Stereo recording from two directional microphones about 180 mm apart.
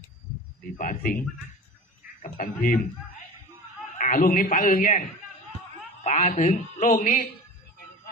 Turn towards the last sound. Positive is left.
turn(degrees=40)  # may be behind; listen again after turning